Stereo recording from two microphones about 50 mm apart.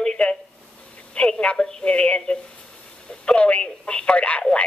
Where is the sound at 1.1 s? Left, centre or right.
Centre.